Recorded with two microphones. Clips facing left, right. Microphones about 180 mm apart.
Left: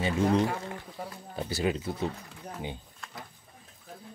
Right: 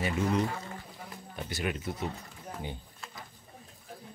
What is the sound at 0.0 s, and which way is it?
Speech, 30° left (ahead or behind).